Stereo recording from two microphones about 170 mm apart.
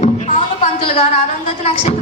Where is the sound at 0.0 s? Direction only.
40° left (ahead or behind).